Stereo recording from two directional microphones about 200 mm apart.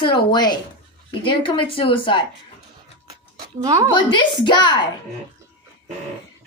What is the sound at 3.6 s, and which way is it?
Speech, 15° right (ahead or behind).